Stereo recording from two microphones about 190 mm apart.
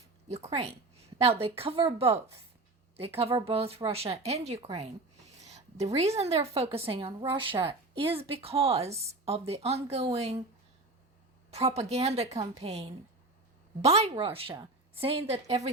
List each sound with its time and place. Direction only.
0.3 s a woman's voice: 35° right (ahead or behind)
4.6 s a sound: 35° right (ahead or behind)
6.1 s a woman's voice: 35° right (ahead or behind)
11.5 s a woman's voice: 35° right (ahead or behind)